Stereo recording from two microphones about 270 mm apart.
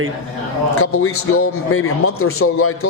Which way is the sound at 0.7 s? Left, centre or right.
Left.